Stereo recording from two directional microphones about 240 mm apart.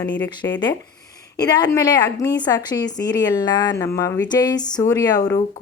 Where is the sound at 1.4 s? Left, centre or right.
Centre.